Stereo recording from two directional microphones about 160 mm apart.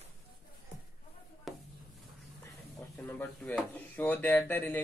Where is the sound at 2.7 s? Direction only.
10° left (ahead or behind).